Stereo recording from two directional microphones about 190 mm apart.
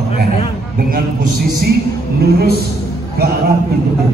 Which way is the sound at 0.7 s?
50° right (ahead or behind).